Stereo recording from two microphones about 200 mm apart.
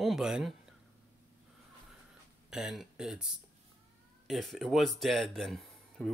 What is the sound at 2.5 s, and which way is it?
Speech, centre (ahead or behind).